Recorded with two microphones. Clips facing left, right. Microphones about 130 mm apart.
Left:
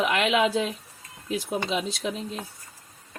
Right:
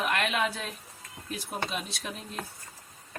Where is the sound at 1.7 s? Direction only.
90° left.